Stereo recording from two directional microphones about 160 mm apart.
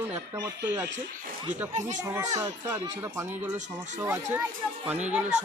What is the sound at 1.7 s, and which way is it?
Speech, 50° right (ahead or behind).